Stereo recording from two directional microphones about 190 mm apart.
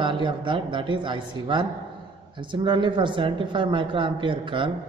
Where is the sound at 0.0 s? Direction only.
25° right (ahead or behind).